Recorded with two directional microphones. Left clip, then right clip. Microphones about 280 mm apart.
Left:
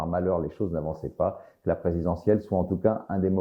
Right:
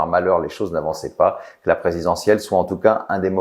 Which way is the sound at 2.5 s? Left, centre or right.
Centre.